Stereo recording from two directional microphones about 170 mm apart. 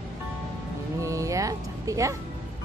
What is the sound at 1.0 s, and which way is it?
Music, 20° right (ahead or behind).